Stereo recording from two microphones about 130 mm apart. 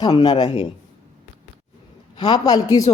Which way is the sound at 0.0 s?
35° left (ahead or behind).